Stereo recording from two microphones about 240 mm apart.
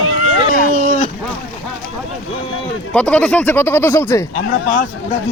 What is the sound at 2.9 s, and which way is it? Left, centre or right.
Speech, centre.